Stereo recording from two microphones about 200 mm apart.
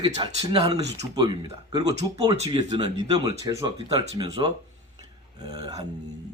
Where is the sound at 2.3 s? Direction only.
30° right (ahead or behind).